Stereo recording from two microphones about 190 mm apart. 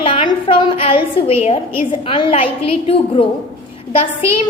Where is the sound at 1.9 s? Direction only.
25° left (ahead or behind).